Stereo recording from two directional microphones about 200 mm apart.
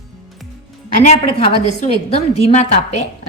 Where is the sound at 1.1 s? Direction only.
30° left (ahead or behind).